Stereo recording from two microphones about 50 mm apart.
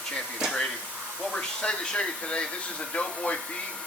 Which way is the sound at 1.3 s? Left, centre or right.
Centre.